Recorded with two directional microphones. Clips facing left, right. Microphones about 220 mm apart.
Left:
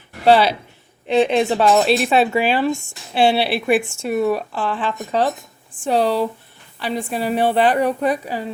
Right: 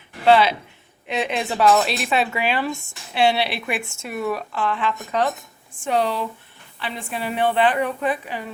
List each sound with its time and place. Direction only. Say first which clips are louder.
0.3 s a woman's voice: left 2 dB; 35° left (ahead or behind)